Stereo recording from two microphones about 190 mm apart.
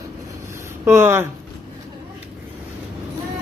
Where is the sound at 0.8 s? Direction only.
15° right (ahead or behind).